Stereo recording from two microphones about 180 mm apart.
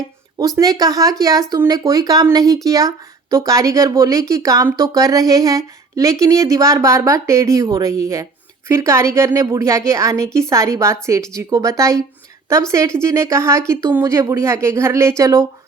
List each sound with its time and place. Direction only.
0.3 s speech: 20° right (ahead or behind)